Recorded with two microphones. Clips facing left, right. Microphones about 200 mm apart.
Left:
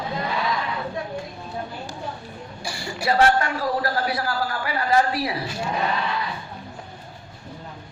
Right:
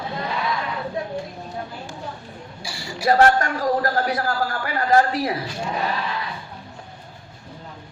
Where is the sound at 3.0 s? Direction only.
40° right (ahead or behind).